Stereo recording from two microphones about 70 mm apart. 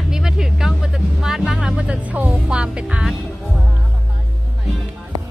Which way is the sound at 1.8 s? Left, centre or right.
Centre.